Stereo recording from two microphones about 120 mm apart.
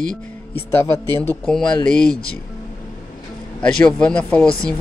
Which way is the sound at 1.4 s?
5° left (ahead or behind).